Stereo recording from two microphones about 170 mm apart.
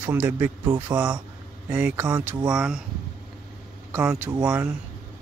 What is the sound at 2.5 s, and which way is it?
Speech, 5° right (ahead or behind).